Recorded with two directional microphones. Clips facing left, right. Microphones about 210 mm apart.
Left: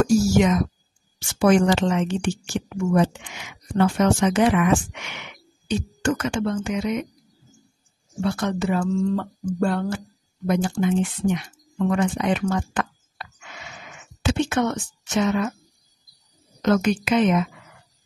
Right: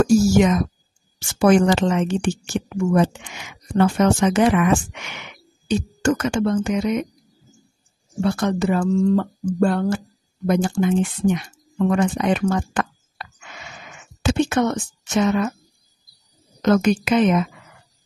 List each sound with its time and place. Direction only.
0.0 s speech: 45° right (ahead or behind)
5.7 s speech: 45° right (ahead or behind)
8.2 s speech: 40° right (ahead or behind)
11.9 s speech: 45° right (ahead or behind)
16.6 s speech: 45° right (ahead or behind)